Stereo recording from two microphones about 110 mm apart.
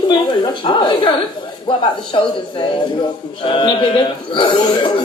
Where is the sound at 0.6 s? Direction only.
45° left (ahead or behind).